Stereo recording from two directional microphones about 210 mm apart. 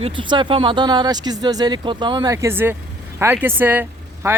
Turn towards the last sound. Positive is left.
turn(degrees=-15)  # may be behind; listen again after turning